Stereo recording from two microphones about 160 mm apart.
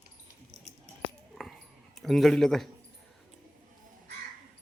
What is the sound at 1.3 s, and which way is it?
Dog, centre (ahead or behind).